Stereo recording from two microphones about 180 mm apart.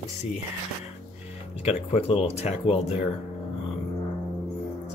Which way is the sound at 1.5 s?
35° left (ahead or behind).